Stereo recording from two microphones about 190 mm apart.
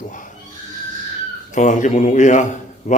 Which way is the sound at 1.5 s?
40° left (ahead or behind).